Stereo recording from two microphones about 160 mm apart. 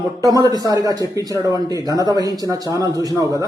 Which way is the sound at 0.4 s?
25° right (ahead or behind).